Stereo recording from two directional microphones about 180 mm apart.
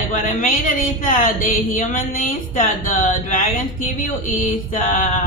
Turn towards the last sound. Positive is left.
turn(degrees=45)  # may be behind; listen again after turning